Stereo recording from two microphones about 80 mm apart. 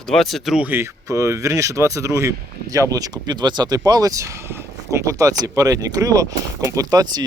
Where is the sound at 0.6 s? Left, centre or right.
Right.